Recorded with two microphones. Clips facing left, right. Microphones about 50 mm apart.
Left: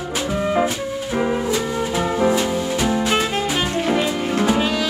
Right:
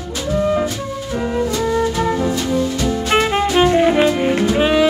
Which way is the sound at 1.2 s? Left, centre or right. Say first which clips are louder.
Right 1 dB; centre.